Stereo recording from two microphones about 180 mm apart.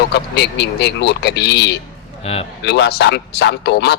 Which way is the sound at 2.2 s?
35° left (ahead or behind).